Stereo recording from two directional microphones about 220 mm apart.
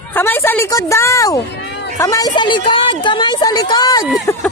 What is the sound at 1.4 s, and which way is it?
Run, 50° left (ahead or behind).